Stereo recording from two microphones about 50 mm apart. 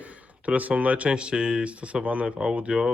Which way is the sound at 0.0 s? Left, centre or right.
Right.